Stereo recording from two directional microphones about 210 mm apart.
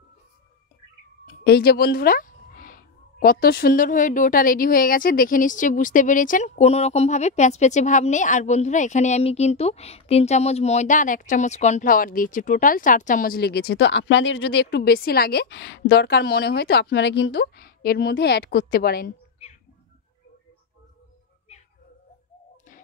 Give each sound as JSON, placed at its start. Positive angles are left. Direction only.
{"t": 1.2, "sound": "speech", "side_deg": 45}